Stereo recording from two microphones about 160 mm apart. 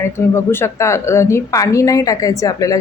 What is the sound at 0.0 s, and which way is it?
A woman's voice, 15° left (ahead or behind).